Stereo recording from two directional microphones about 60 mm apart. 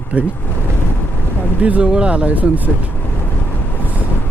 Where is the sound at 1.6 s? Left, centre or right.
Right.